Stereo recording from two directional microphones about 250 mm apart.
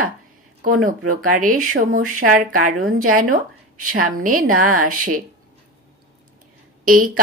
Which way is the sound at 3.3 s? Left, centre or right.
Right.